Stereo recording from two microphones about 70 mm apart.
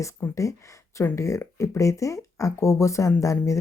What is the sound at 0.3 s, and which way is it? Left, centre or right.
Speech, left.